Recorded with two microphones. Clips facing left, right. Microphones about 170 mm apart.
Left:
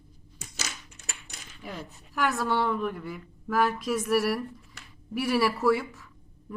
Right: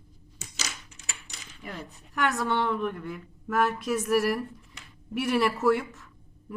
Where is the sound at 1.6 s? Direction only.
Centre (ahead or behind).